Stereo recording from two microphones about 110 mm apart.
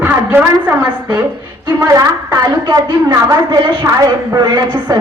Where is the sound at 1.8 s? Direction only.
35° right (ahead or behind).